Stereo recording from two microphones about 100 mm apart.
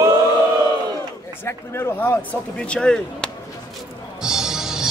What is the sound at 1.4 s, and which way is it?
Speech, 20° left (ahead or behind).